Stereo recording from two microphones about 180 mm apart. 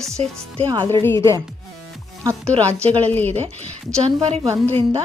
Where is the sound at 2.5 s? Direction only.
30° right (ahead or behind).